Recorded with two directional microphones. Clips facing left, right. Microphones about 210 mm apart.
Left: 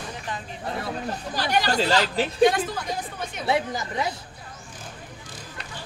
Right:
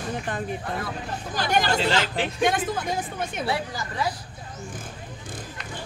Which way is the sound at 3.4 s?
20° left (ahead or behind).